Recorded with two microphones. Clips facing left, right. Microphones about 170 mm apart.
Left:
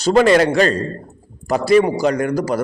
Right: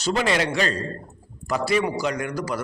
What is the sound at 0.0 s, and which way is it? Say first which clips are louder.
A man's voice: left 10 dB; 45° left (ahead or behind).